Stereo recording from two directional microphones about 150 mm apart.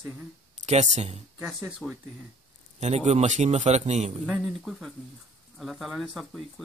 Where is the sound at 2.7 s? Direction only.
45° right (ahead or behind).